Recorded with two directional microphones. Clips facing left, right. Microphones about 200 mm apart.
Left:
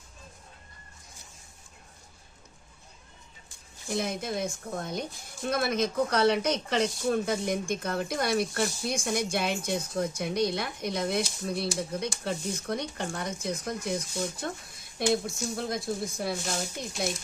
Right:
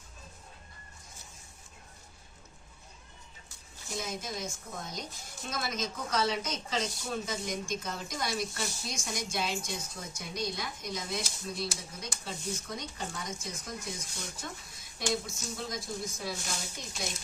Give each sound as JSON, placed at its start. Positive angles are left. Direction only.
{"t": 3.9, "sound": "speech", "side_deg": 60}